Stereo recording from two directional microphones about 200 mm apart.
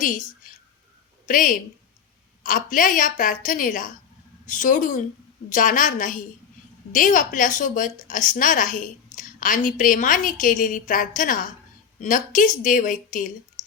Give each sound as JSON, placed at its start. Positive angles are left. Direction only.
{"t": 0.4, "sound": "whispering", "side_deg": 45}
{"t": 1.3, "sound": "a woman's voice", "side_deg": 40}